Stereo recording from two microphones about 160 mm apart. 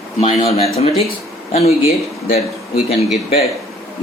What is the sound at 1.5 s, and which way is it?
Speech, 40° left (ahead or behind).